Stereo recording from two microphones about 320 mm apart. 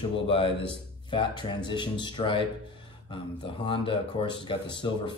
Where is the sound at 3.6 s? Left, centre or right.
Centre.